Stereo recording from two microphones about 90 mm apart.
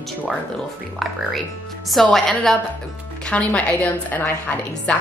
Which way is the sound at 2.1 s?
5° left (ahead or behind).